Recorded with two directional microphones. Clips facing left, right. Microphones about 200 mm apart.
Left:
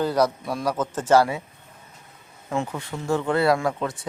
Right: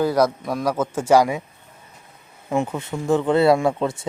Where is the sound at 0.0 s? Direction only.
10° right (ahead or behind).